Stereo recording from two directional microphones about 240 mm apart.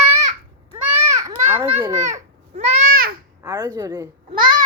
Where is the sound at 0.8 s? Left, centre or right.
Centre.